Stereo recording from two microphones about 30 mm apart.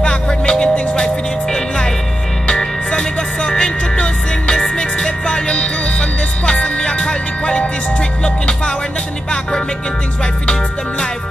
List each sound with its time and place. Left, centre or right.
0.3 s music: left